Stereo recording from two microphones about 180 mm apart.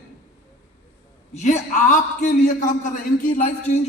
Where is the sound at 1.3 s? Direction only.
40° left (ahead or behind).